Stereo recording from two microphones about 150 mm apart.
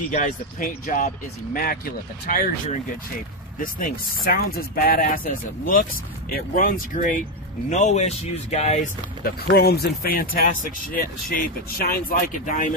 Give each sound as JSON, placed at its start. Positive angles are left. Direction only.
{"t": 0.1, "sound": "speech", "side_deg": 60}
{"t": 3.5, "sound": "speech", "side_deg": 65}
{"t": 7.7, "sound": "speech", "side_deg": 50}
{"t": 9.6, "sound": "speech", "side_deg": 90}
{"t": 10.3, "sound": "speech", "side_deg": 70}